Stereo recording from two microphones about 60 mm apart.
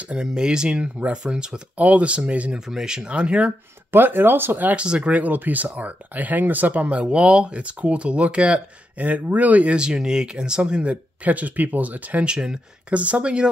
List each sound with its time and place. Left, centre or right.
0.0 s speech: centre
2.6 s speech: centre
3.9 s speech: right
4.7 s speech: centre
12.3 s speech: centre